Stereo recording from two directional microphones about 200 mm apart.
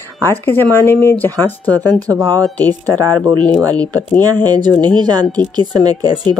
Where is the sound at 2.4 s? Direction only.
10° left (ahead or behind).